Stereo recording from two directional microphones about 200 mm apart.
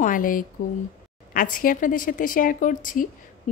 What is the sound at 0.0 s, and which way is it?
A woman's voice, 45° left (ahead or behind).